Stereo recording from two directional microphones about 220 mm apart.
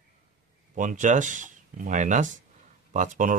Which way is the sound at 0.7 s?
35° right (ahead or behind).